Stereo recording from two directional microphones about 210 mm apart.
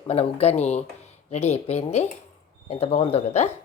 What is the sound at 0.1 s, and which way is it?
Speech, 30° left (ahead or behind).